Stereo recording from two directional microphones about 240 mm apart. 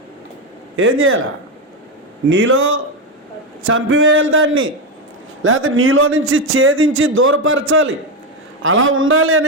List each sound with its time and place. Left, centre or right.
0.8 s a man's voice: right
2.3 s a man's voice: right